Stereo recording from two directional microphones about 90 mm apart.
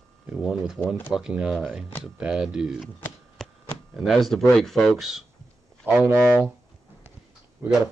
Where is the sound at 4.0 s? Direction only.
Centre (ahead or behind).